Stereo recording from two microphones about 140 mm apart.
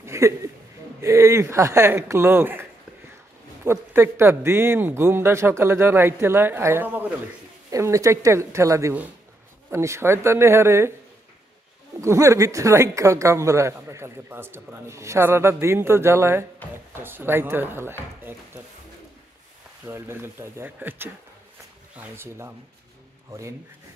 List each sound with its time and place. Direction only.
0.0 s a sound: 20° right (ahead or behind)
1.0 s speech: 20° right (ahead or behind)
3.6 s speech: 15° right (ahead or behind)
12.0 s speech: 20° right (ahead or behind)
19.8 s speech: 15° right (ahead or behind)